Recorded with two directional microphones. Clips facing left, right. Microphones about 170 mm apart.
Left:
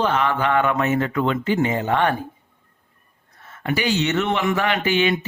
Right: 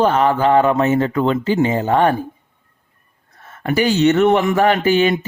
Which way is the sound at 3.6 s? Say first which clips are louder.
Right 7 dB; 45° right (ahead or behind).